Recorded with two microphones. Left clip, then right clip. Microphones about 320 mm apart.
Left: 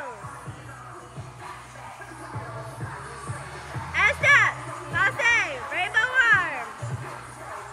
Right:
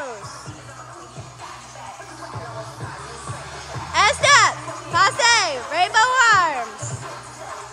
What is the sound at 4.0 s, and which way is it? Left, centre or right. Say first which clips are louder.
Music: right 4 dB; centre.